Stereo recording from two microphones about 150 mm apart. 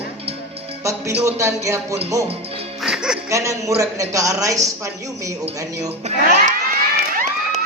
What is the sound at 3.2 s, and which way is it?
Speech, 20° right (ahead or behind).